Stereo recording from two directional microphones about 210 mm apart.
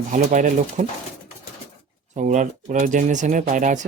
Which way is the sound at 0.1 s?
35° right (ahead or behind).